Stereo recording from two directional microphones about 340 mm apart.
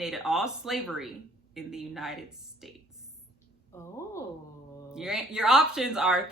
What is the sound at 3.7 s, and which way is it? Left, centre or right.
A woman's voice, centre.